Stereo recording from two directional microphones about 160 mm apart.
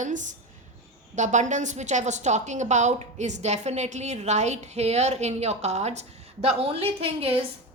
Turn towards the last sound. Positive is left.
turn(degrees=-40)  # may be behind; listen again after turning